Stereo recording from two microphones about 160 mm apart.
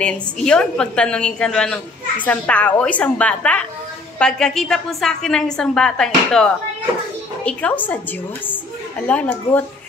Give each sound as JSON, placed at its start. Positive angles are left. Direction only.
{"t": 0.0, "sound": "a woman's voice", "side_deg": 5}
{"t": 9.0, "sound": "a woman's voice", "side_deg": 10}